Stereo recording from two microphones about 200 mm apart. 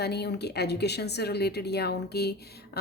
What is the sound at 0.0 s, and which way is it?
Speech, 55° left (ahead or behind).